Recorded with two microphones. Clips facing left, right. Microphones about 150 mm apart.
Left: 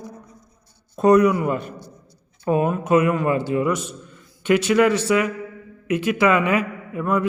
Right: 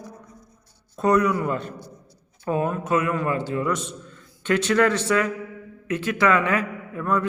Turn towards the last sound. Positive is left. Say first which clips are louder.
# left 2 dB
turn(degrees=15)  # may be behind; listen again after turning